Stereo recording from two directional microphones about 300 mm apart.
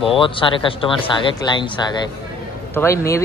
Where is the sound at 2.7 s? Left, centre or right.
Centre.